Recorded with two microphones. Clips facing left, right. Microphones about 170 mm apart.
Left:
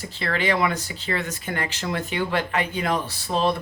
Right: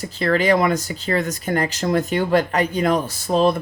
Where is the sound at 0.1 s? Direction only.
40° right (ahead or behind).